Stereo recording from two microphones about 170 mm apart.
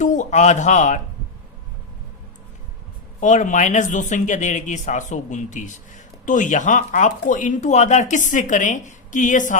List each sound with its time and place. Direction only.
0.0 s speech: 45° left (ahead or behind)
3.2 s speech: 45° left (ahead or behind)